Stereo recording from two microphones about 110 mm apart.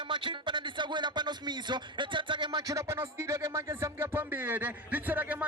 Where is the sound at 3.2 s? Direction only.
25° right (ahead or behind).